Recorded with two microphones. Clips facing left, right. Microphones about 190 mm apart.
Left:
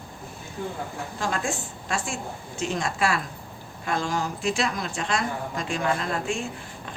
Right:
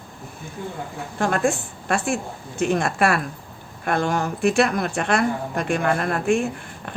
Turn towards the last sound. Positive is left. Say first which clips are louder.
# right 6 dB
turn(degrees=-60)  # may be behind; listen again after turning